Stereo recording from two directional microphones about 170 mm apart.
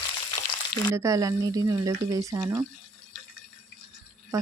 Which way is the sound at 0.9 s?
20° right (ahead or behind).